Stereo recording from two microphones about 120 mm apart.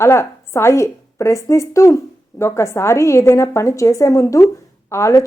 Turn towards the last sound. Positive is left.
turn(degrees=25)  # may be behind; listen again after turning